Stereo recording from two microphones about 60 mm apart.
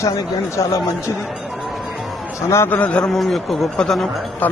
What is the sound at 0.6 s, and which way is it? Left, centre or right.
Speech, left.